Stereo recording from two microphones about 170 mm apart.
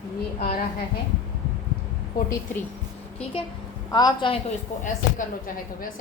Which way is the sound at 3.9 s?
25° left (ahead or behind).